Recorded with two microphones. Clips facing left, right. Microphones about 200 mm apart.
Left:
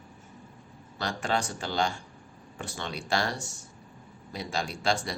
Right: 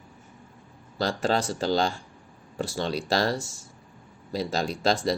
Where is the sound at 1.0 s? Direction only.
35° right (ahead or behind).